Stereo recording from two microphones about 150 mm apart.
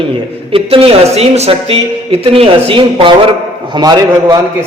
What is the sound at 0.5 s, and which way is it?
A man's voice, 40° right (ahead or behind).